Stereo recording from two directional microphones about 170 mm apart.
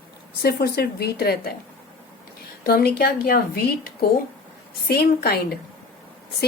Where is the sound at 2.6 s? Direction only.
60° left (ahead or behind).